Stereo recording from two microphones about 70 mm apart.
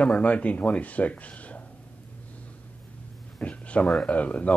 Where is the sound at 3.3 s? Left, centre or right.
Centre.